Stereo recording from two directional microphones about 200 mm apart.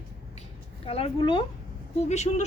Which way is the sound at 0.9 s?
25° left (ahead or behind).